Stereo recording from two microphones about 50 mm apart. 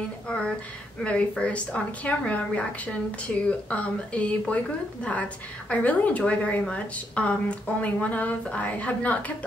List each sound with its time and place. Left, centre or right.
1.0 s a woman's voice: left